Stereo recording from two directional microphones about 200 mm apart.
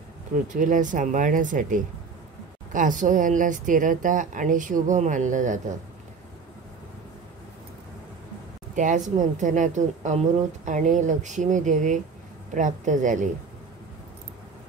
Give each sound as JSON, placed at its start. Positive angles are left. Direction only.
{"t": 0.5, "sound": "speech", "side_deg": -40}
{"t": 8.7, "sound": "speech", "side_deg": -40}